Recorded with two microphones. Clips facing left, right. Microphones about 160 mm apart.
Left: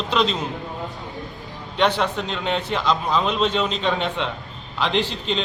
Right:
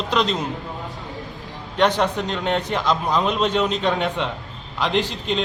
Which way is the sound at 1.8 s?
15° right (ahead or behind).